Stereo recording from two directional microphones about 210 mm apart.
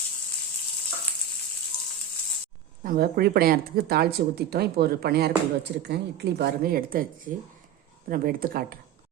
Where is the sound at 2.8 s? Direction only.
45° right (ahead or behind).